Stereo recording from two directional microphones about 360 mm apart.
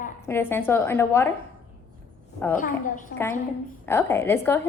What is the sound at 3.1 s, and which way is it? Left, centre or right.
A woman's voice, centre.